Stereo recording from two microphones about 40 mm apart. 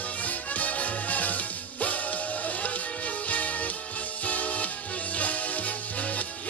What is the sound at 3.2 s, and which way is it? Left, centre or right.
Music, left.